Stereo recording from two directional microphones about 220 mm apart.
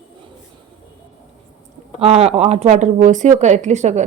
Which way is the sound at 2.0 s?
25° right (ahead or behind).